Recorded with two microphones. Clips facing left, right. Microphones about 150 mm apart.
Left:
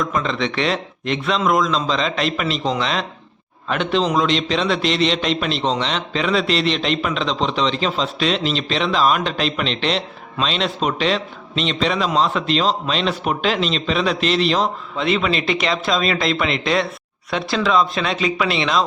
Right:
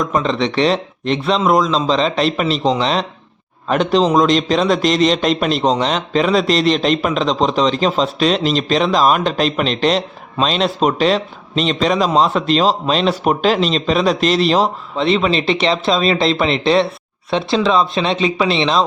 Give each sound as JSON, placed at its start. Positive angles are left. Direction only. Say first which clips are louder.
{"t": 0.0, "sound": "a man's voice", "louder": "right 4 dB", "side_deg": -35}